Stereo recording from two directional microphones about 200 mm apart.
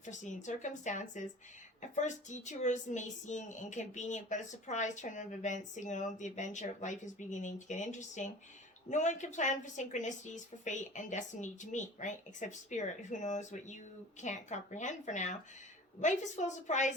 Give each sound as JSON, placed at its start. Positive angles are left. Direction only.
{"t": 0.0, "sound": "a woman's voice", "side_deg": 35}